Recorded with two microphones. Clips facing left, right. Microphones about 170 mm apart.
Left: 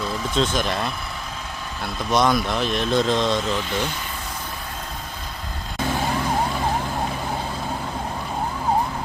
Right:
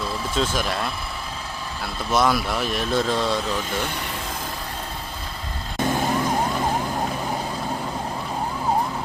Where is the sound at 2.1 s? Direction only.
5° right (ahead or behind).